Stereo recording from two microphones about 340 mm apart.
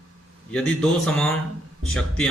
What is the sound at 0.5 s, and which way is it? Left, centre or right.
A man's voice, centre.